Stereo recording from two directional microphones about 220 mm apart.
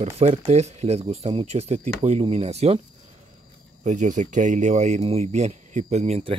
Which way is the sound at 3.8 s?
35° right (ahead or behind).